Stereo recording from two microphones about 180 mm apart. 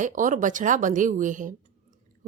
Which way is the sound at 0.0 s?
45° right (ahead or behind).